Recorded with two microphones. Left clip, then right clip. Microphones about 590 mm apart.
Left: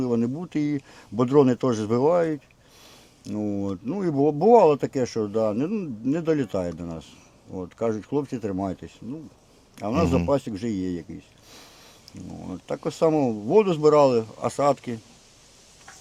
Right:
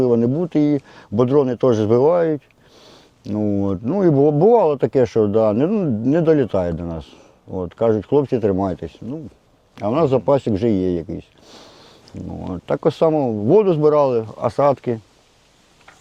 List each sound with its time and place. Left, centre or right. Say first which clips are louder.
0.0 s speech: right 9 dB; centre
12.5 s speech: right 11 dB; right